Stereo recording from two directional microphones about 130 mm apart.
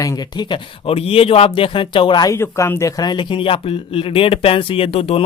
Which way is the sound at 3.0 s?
35° left (ahead or behind).